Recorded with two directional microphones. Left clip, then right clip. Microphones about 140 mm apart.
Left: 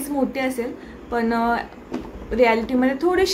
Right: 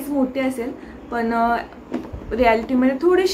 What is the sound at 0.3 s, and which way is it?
A woman's voice, 25° left (ahead or behind).